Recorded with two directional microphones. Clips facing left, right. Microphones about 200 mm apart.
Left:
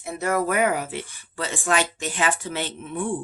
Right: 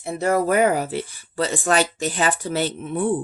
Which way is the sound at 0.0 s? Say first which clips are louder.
Right 4 dB; 30° right (ahead or behind).